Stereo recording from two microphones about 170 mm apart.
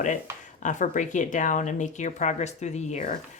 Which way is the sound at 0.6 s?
45° left (ahead or behind).